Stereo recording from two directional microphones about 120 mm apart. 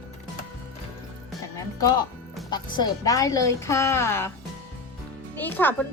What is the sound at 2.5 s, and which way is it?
A woman's voice, 35° left (ahead or behind).